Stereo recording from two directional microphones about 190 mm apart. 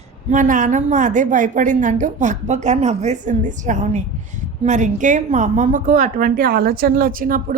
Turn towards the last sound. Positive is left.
turn(degrees=-45)  # may be behind; listen again after turning